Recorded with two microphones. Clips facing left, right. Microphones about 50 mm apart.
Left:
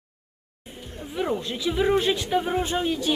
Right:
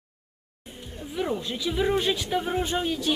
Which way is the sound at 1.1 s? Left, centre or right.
Centre.